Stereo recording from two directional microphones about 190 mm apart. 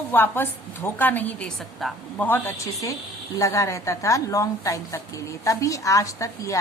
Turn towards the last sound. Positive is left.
turn(degrees=15)  # may be behind; listen again after turning